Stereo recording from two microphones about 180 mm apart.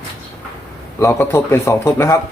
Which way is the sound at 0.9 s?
15° left (ahead or behind).